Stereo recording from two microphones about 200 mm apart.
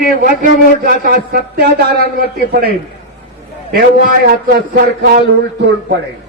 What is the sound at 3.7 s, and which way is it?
A man's voice, 50° right (ahead or behind).